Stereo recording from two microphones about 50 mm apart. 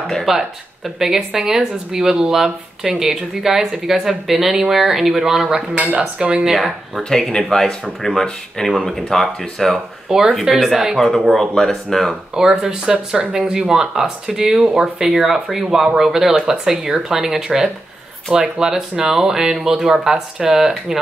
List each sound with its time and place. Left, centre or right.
0.0 s speech: centre; by 6.4 s right
6.4 s speech: centre
10.0 s speech: centre
12.1 s speech: centre